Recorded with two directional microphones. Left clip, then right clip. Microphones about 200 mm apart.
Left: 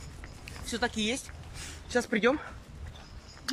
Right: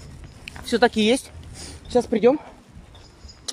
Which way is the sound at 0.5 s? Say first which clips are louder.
Right 13 dB; 45° right (ahead or behind).